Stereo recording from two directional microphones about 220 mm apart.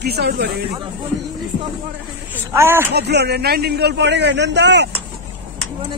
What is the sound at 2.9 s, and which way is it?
A man's voice, 50° right (ahead or behind).